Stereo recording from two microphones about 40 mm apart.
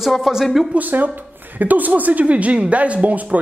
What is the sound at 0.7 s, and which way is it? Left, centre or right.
A woman's voice, right.